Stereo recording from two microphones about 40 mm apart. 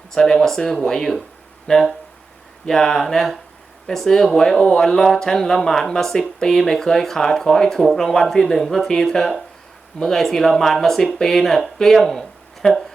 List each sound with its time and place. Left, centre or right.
0.1 s speech: centre